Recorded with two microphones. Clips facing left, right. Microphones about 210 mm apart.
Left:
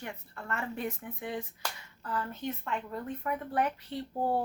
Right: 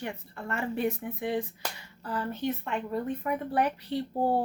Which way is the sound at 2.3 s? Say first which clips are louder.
Right 6 dB; 70° right (ahead or behind).